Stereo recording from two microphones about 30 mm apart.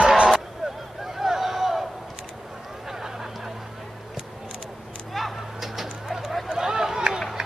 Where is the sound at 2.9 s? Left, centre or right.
Centre.